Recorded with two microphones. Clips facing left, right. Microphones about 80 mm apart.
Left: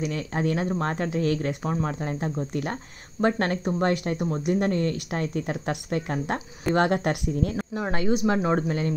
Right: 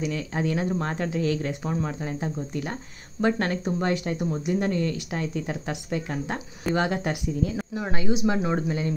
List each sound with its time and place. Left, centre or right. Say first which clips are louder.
0.0 s speech: left 1 dB; left
1.6 s speech: left 1 dB; left